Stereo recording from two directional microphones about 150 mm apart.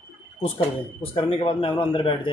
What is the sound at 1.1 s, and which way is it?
Speech, 35° left (ahead or behind).